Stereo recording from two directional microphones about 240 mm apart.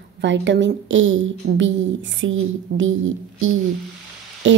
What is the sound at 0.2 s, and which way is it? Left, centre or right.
A woman's voice, right.